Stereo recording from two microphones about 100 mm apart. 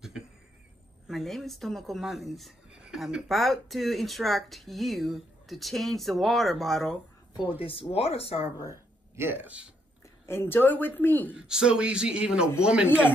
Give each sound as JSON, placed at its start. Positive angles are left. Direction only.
{"t": 1.0, "sound": "speech", "side_deg": 0}
{"t": 7.9, "sound": "speech", "side_deg": 85}
{"t": 8.6, "sound": "speech", "side_deg": -25}
{"t": 10.2, "sound": "a woman's voice", "side_deg": 25}
{"t": 11.3, "sound": "a man's voice", "side_deg": -5}